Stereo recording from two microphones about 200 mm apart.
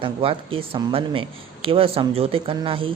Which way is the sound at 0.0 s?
25° right (ahead or behind).